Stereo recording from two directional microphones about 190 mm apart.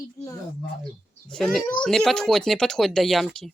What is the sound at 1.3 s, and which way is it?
Speech, centre (ahead or behind).